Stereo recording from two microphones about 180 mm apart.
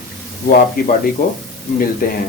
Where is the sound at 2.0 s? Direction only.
55° left (ahead or behind).